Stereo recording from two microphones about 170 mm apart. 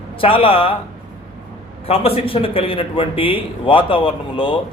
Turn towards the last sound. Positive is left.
turn(degrees=30)  # may be behind; listen again after turning